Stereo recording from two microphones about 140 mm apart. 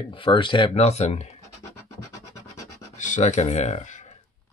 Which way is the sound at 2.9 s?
60° left (ahead or behind).